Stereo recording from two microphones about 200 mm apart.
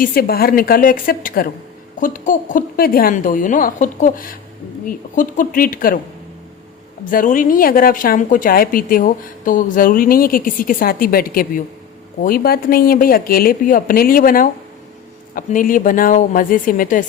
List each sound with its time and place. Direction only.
0.0 s speech: 45° left (ahead or behind)
7.0 s speech: 45° left (ahead or behind)